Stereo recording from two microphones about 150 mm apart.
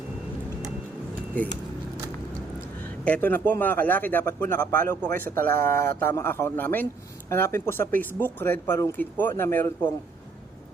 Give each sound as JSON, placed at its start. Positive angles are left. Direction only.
{"t": 1.4, "sound": "speech", "side_deg": 10}
{"t": 3.0, "sound": "speech", "side_deg": 10}